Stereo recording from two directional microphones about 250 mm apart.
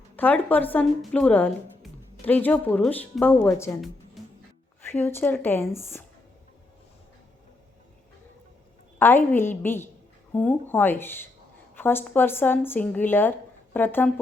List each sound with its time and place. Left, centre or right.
0.2 s speech: centre
4.9 s speech: centre
9.0 s speech: centre